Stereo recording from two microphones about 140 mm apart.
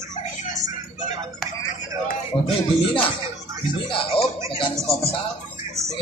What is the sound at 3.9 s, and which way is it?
Music, 40° left (ahead or behind).